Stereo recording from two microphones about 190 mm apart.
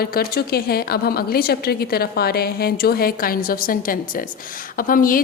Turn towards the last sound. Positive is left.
turn(degrees=50)  # may be behind; listen again after turning